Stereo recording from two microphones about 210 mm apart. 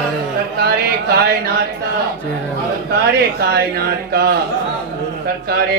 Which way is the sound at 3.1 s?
50° right (ahead or behind).